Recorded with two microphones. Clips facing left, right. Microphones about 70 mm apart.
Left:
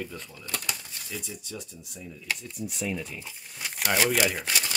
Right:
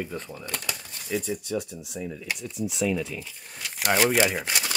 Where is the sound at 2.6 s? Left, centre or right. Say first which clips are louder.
Right 6 dB; right.